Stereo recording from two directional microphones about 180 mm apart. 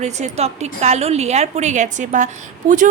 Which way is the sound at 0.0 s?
35° right (ahead or behind).